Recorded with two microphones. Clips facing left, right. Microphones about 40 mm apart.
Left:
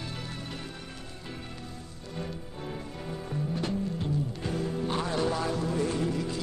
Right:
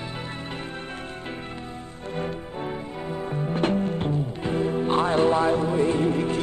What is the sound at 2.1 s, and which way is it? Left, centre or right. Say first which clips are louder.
Music: right 8 dB; right.